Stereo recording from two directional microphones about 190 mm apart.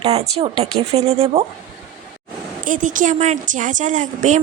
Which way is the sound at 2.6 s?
45° right (ahead or behind).